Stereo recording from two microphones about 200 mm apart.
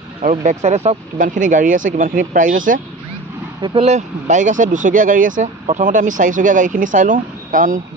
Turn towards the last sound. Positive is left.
turn(degrees=-40)  # may be behind; listen again after turning